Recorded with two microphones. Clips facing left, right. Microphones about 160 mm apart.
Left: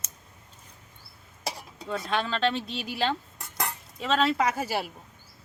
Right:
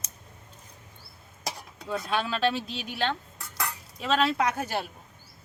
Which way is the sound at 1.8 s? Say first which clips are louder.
Even; 5° right (ahead or behind).